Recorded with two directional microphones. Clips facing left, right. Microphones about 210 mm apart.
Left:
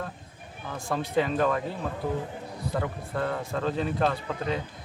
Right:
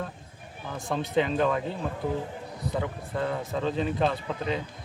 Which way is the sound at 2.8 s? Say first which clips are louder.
Even; 5° right (ahead or behind).